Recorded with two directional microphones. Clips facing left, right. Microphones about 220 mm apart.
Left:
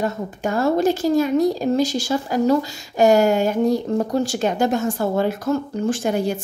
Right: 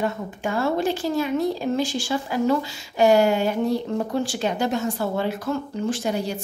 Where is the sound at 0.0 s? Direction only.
40° left (ahead or behind).